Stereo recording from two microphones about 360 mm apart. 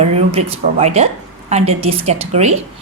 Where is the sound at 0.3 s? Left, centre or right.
Centre.